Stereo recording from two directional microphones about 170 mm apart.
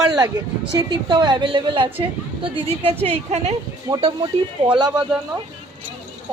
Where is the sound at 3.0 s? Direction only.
40° right (ahead or behind).